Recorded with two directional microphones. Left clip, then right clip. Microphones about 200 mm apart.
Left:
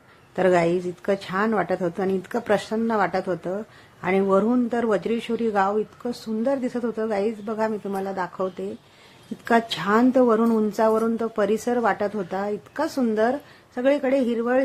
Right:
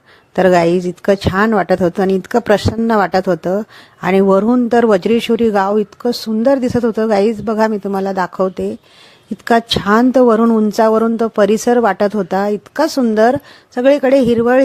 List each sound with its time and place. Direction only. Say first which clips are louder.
0.3 s speech: right 9 dB; 45° right (ahead or behind)